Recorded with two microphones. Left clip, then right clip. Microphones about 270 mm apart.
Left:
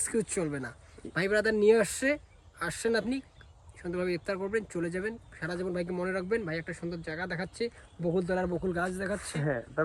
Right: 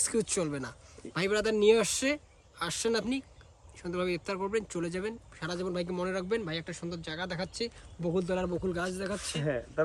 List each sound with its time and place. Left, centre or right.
0.0 s speech: centre